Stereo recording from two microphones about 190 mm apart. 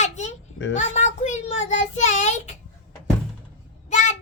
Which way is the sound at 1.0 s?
40° left (ahead or behind).